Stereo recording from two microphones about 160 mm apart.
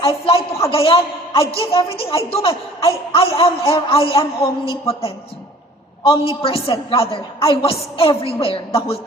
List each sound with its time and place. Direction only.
0.0 s a man's voice: 35° left (ahead or behind)